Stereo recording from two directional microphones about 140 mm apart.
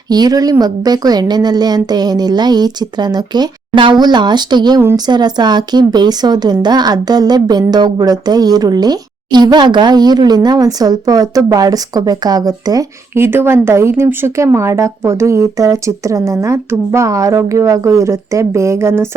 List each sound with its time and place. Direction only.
0.1 s a woman's voice: 30° right (ahead or behind)